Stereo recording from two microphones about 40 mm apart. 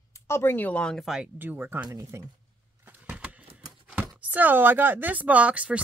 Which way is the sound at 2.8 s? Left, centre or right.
Right.